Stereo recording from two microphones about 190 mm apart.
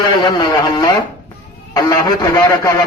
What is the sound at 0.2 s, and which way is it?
Speech, 20° left (ahead or behind).